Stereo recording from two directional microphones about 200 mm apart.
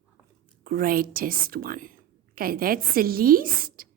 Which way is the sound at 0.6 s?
45° right (ahead or behind).